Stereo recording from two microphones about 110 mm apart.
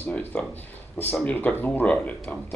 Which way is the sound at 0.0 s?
15° left (ahead or behind).